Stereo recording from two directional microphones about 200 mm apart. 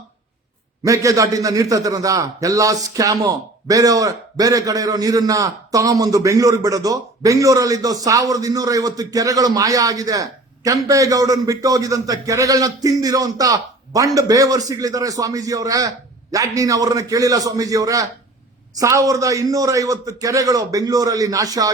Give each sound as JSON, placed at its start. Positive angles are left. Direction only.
{"t": 0.9, "sound": "a man's voice", "side_deg": -15}